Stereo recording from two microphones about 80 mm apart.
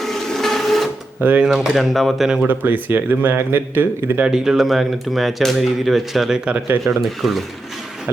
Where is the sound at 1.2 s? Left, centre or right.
Right.